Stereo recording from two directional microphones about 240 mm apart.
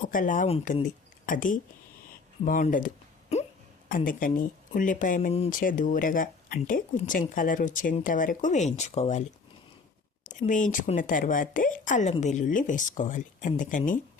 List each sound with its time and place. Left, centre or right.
0.1 s a woman's voice: left
2.4 s a sound: left
3.8 s a woman's voice: left
10.2 s a woman's voice: left